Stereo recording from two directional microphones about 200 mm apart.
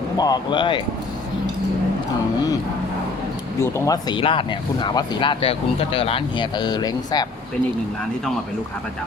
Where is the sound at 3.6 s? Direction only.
15° left (ahead or behind).